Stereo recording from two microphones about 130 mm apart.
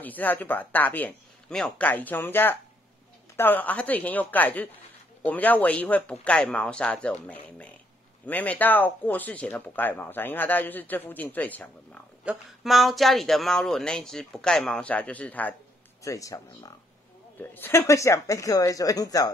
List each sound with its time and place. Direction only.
0.0 s speech: 15° left (ahead or behind)
12.3 s speech: centre (ahead or behind)
16.0 s speech: 25° left (ahead or behind)